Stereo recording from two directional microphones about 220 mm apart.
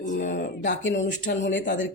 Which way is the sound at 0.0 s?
35° left (ahead or behind).